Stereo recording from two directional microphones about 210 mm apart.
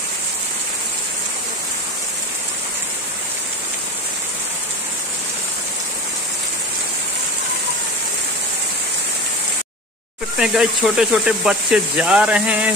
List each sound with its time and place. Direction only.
10.3 s speech: centre (ahead or behind)